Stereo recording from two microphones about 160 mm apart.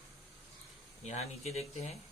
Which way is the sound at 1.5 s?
40° left (ahead or behind).